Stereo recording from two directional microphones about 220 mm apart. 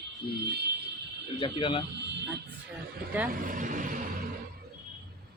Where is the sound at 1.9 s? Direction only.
50° right (ahead or behind).